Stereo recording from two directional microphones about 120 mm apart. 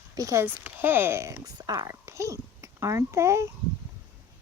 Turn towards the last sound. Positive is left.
turn(degrees=-25)  # may be behind; listen again after turning